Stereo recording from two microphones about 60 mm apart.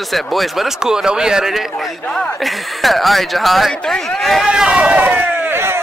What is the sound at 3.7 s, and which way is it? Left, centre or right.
Speech, centre.